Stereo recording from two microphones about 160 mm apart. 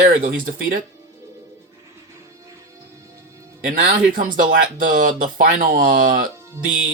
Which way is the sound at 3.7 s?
55° right (ahead or behind).